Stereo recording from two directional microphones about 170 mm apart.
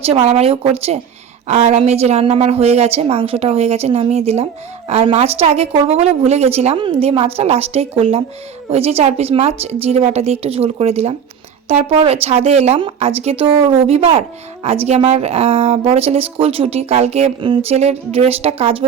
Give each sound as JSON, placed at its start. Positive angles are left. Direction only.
{"t": 0.0, "sound": "a woman's voice", "side_deg": -35}